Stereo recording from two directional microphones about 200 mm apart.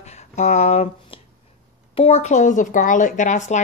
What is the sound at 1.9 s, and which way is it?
Speech, 30° left (ahead or behind).